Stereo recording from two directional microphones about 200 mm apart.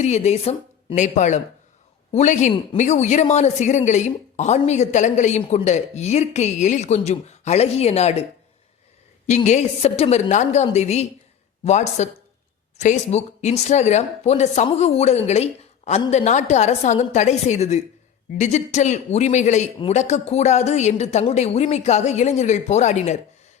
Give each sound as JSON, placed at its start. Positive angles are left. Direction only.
{"t": 0.0, "sound": "speech", "side_deg": 35}
{"t": 9.2, "sound": "speech", "side_deg": 35}